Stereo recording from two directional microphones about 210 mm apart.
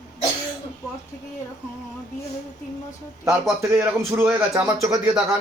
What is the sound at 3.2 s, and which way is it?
Speech, 15° right (ahead or behind).